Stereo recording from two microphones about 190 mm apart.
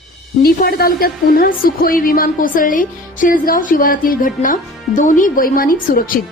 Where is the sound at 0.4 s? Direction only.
55° left (ahead or behind).